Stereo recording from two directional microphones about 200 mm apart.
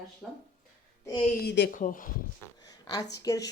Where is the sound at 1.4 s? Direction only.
55° left (ahead or behind).